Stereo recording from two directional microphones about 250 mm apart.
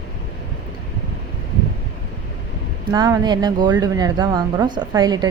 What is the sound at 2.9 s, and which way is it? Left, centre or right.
A woman's voice, centre.